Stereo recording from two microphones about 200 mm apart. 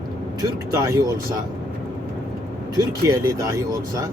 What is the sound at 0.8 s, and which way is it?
Speech, 15° right (ahead or behind).